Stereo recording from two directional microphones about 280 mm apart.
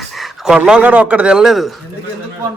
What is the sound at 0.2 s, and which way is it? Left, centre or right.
Speech, centre.